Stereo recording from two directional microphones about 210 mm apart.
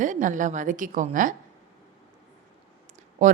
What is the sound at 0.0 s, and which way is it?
A woman's voice, 35° right (ahead or behind).